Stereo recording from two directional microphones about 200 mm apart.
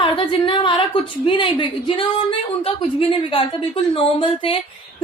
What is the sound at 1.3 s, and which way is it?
Speech, 25° left (ahead or behind).